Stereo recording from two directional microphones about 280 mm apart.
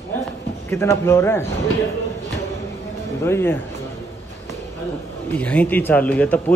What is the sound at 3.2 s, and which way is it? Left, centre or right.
Speech, centre.